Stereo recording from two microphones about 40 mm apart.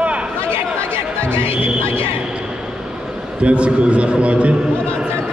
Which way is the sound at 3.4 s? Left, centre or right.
Right.